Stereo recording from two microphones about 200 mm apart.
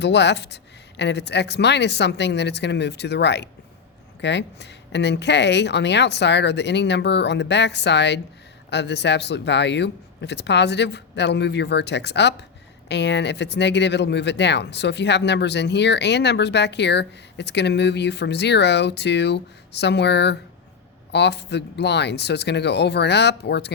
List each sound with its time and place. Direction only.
0.0 s speech: 60° left (ahead or behind)